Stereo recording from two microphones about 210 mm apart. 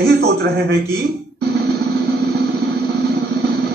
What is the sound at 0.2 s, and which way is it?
Speech, 50° right (ahead or behind).